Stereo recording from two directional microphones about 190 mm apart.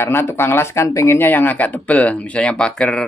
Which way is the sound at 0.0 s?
10° left (ahead or behind).